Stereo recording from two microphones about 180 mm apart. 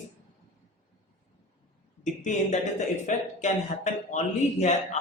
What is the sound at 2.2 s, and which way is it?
Speech, 40° left (ahead or behind).